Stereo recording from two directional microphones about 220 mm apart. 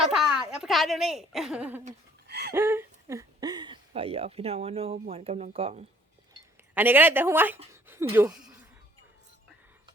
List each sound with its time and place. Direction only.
0.1 s speech: 5° right (ahead or behind)
2.2 s a sound: 50° right (ahead or behind)
2.5 s speech: 10° right (ahead or behind); by 5.8 s 25° right (ahead or behind)
6.7 s a woman's voice: 10° right (ahead or behind)